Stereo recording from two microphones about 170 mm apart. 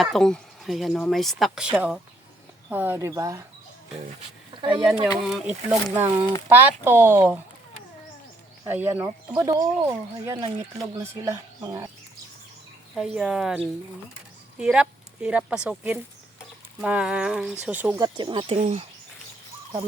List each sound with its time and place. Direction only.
0.0 s speech: centre (ahead or behind); by 3.4 s 20° right (ahead or behind)
4.8 s speech: 5° right (ahead or behind)
8.6 s speech: 15° right (ahead or behind)
12.9 s speech: 5° right (ahead or behind)
18.0 s speech: 25° right (ahead or behind)
18.5 s speech: 45° right (ahead or behind)